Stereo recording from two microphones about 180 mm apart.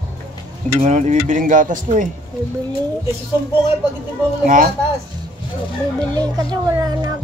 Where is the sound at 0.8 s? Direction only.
40° right (ahead or behind).